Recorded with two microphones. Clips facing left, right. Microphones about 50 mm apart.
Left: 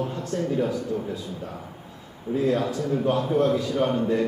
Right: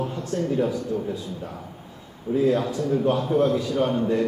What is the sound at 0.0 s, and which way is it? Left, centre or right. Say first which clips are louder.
Speech: right 1 dB; centre.